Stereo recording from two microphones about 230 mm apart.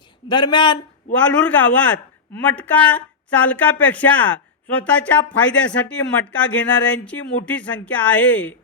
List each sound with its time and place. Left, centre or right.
0.3 s speech: centre
1.1 s a man's voice: centre